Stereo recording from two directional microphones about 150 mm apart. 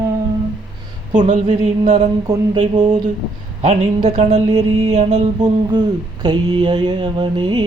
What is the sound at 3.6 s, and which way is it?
Music, 45° right (ahead or behind).